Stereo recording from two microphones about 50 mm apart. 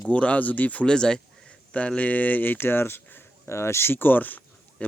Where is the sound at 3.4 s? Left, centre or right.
Left.